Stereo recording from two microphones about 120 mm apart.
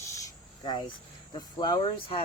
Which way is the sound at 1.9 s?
45° left (ahead or behind).